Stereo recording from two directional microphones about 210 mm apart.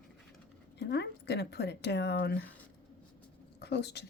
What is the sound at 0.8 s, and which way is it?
A woman's voice, 55° left (ahead or behind).